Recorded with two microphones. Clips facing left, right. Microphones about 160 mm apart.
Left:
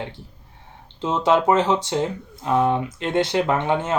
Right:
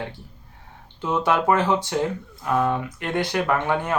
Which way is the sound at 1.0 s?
25° left (ahead or behind).